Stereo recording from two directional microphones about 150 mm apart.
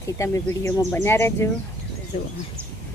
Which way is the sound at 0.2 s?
20° left (ahead or behind).